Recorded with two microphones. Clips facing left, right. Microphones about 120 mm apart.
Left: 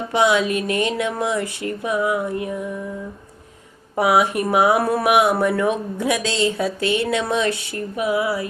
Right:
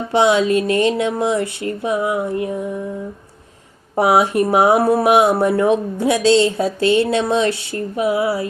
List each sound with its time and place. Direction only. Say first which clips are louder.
0.1 s speech: right 4 dB; 30° right (ahead or behind)
3.9 s speech: right 3 dB; 30° right (ahead or behind)